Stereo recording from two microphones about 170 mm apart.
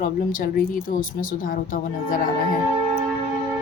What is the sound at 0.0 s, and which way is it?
A woman's voice, 55° left (ahead or behind).